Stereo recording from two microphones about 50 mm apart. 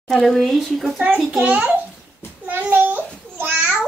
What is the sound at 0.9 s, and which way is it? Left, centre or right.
Speech, centre.